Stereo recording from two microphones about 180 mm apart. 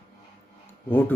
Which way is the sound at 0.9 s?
10° left (ahead or behind).